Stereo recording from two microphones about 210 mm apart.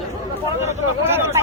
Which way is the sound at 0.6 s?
10° right (ahead or behind).